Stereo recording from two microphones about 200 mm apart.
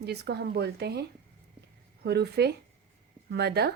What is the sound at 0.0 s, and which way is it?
Speech, 55° right (ahead or behind).